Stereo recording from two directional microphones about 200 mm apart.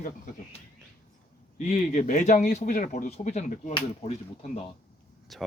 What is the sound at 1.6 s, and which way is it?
Speech, 40° left (ahead or behind).